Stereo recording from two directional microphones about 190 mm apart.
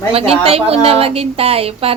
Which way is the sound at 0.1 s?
30° right (ahead or behind).